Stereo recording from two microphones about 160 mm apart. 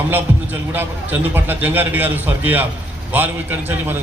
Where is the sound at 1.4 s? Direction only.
10° right (ahead or behind).